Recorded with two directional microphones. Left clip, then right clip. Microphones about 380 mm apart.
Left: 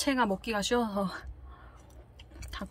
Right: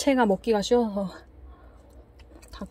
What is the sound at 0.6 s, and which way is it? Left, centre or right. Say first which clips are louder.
Speech: right 6 dB; centre.